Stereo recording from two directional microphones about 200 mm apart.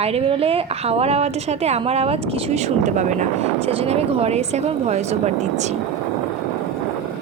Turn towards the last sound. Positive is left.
turn(degrees=-35)  # may be behind; listen again after turning